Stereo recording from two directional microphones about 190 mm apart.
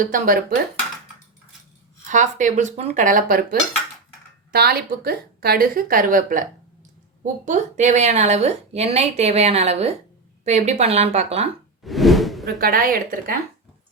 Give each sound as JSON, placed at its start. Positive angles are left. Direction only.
{"t": 0.0, "sound": "a woman's voice", "side_deg": -45}
{"t": 2.0, "sound": "a woman's voice", "side_deg": -40}
{"t": 11.8, "sound": "plop", "side_deg": 0}
{"t": 12.5, "sound": "a woman's voice", "side_deg": -50}